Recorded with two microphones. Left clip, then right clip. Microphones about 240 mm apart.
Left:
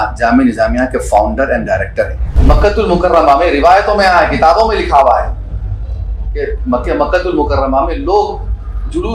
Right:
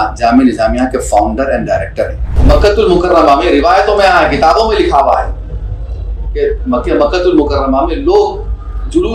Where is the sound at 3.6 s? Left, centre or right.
Centre.